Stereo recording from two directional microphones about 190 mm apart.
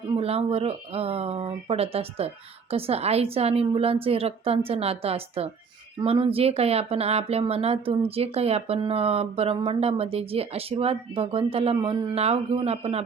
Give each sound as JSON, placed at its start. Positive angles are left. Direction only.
{"t": 0.2, "sound": "speech", "side_deg": -30}